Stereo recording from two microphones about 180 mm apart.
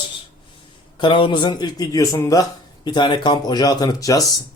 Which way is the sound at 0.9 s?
25° left (ahead or behind).